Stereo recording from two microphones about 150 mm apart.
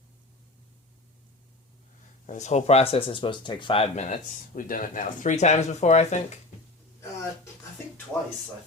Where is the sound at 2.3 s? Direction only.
50° left (ahead or behind).